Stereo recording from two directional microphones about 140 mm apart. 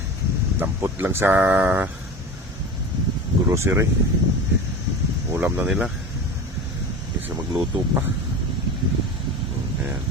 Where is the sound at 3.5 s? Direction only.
20° right (ahead or behind).